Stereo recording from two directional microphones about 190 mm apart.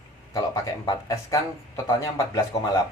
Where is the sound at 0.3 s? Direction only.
20° left (ahead or behind).